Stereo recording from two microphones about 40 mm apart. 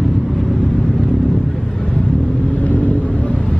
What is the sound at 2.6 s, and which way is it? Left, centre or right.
Vehicle, left.